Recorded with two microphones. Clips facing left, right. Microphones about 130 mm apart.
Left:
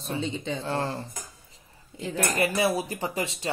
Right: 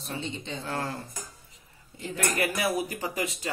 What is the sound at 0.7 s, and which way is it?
Speech, 25° left (ahead or behind).